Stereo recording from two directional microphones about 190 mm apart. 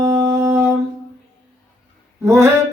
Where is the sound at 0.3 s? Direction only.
15° right (ahead or behind).